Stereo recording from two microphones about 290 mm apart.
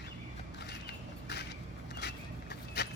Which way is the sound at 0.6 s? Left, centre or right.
Left.